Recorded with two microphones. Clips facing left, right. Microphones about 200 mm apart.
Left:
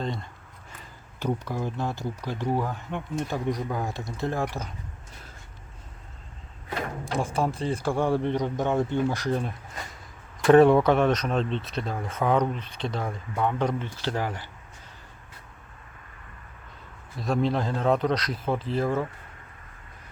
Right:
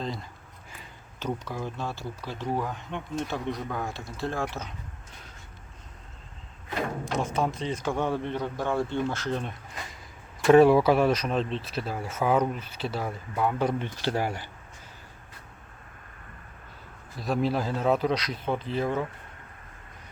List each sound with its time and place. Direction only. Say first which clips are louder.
0.0 s a sound: left 2 dB; centre (ahead or behind)
1.2 s speech: left 3 dB; 15° left (ahead or behind)
7.0 s music: left 1 dB; 30° left (ahead or behind)
7.3 s speech: left 2 dB; 10° left (ahead or behind)
10.4 s speech: left 1 dB; 5° right (ahead or behind)
17.2 s speech: left 1 dB; centre (ahead or behind)